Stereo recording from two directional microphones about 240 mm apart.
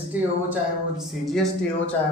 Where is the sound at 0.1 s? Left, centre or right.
Centre.